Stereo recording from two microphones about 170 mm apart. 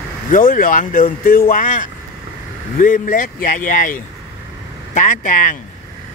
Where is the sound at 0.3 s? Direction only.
50° left (ahead or behind).